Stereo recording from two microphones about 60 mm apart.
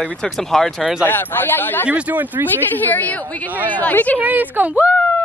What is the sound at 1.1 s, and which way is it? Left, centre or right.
Speech, left.